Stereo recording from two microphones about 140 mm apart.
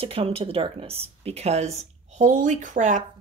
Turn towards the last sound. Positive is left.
turn(degrees=-60)  # may be behind; listen again after turning